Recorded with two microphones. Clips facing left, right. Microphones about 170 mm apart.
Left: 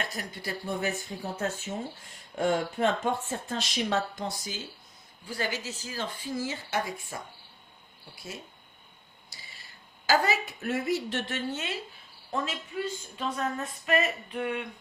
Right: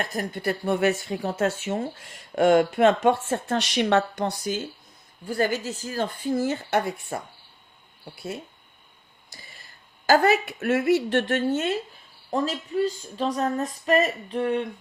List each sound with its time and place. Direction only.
0.0 s speech: 50° right (ahead or behind)
9.3 s a sound: 50° right (ahead or behind)
10.1 s speech: 60° right (ahead or behind)
12.3 s speech: 35° right (ahead or behind)